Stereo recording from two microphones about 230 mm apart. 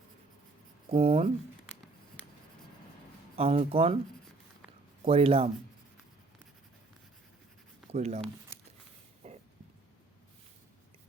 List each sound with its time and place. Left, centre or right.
0.9 s speech: right
3.3 s speech: right
5.0 s speech: right
7.9 s speech: right
9.2 s a sound: right